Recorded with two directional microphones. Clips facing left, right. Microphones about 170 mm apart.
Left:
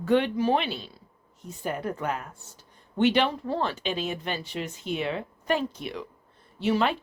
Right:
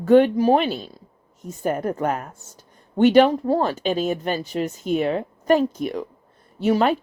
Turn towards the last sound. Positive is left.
turn(degrees=-45)  # may be behind; listen again after turning